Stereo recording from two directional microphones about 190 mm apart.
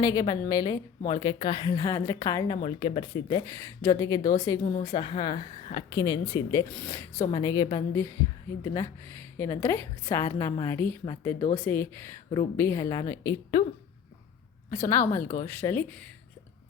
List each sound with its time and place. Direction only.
0.0 s a woman's voice: 20° left (ahead or behind)
2.6 s a woman's voice: 30° left (ahead or behind)
4.6 s speech: 35° left (ahead or behind)
4.9 s a woman's voice: 20° left (ahead or behind)
7.3 s a woman's voice: 20° left (ahead or behind)
14.7 s a woman's voice: 15° left (ahead or behind)